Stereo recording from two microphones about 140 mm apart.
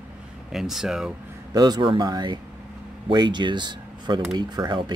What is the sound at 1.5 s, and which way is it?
Speech, 30° right (ahead or behind).